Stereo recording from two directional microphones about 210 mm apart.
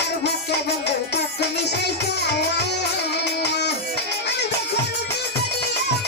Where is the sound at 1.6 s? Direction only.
55° left (ahead or behind).